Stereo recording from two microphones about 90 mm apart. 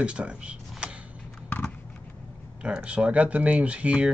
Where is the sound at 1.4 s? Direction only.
20° left (ahead or behind).